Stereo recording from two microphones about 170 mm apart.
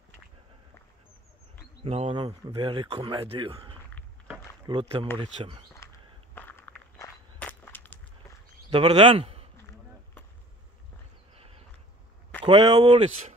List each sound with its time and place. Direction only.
1.9 s speech: 35° right (ahead or behind)
5.8 s a sound: 15° left (ahead or behind)
6.3 s walk: 10° left (ahead or behind)
8.6 s a man's voice: 25° right (ahead or behind)
12.4 s speech: 25° right (ahead or behind)
12.8 s speech: 40° right (ahead or behind)